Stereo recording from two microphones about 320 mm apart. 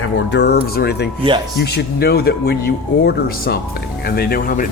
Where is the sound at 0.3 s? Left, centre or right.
Left.